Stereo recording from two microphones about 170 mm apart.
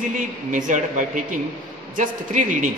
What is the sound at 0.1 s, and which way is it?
A man's voice, 50° right (ahead or behind).